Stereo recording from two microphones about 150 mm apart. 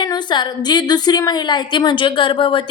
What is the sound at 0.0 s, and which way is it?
A woman's voice, 30° left (ahead or behind).